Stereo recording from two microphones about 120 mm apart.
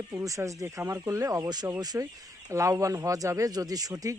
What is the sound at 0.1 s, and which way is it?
Speech, 25° right (ahead or behind).